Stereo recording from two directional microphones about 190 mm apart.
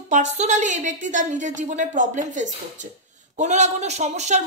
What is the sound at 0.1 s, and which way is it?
A woman's voice, 40° right (ahead or behind).